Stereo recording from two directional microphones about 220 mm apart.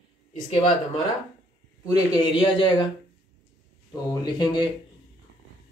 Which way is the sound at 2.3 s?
25° left (ahead or behind).